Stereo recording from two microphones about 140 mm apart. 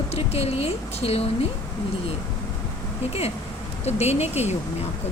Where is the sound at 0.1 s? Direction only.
45° left (ahead or behind).